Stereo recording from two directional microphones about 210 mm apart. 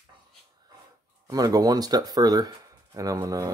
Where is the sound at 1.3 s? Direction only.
15° right (ahead or behind).